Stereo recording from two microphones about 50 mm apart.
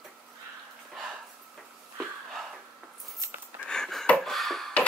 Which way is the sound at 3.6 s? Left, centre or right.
Centre.